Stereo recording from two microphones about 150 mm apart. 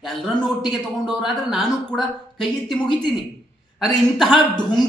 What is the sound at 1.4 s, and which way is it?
A woman's voice, centre (ahead or behind).